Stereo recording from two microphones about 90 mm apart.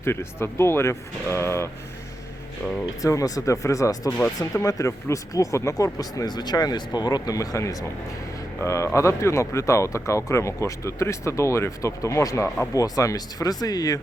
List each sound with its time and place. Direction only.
0.0 s speech: 30° left (ahead or behind)
3.0 s speech: 40° left (ahead or behind)